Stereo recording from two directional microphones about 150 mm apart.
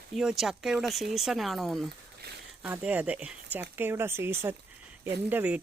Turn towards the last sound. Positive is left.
turn(degrees=-10)  # may be behind; listen again after turning